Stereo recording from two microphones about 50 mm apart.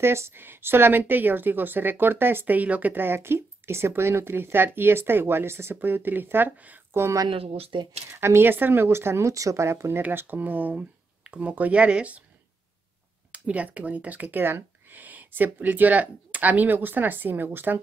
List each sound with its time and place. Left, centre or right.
0.0 s a woman's voice: right
0.4 s speech: right
5.8 s speech: right
6.9 s a woman's voice: right
8.5 s a woman's voice: right
10.1 s speech: right
13.3 s speech: right
14.4 s speech: right